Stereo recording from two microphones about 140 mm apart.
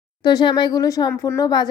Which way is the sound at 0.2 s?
30° left (ahead or behind).